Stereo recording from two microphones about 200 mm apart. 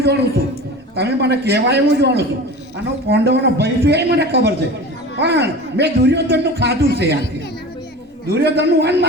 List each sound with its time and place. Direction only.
0.0 s a man's voice: 55° right (ahead or behind)
8.3 s a man's voice: 55° right (ahead or behind)